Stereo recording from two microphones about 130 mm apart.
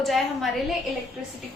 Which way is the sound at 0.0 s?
Centre (ahead or behind).